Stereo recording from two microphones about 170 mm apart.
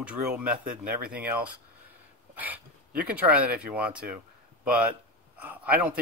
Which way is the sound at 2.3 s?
10° right (ahead or behind).